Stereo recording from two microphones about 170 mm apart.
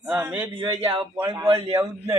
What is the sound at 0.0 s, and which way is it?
Speech, 5° right (ahead or behind).